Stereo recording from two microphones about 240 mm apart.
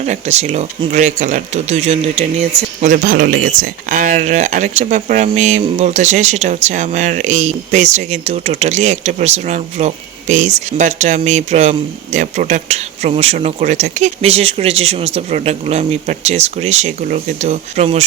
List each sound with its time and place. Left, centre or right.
0.0 s speech: right